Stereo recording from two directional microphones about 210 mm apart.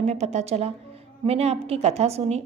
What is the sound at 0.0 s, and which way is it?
A woman's voice, 30° right (ahead or behind).